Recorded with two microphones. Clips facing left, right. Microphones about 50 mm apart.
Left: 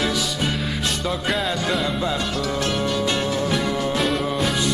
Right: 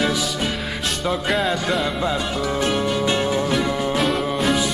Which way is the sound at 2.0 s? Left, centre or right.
Centre.